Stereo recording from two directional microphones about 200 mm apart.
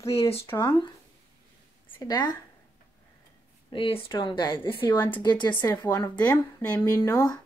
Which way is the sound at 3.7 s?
25° left (ahead or behind).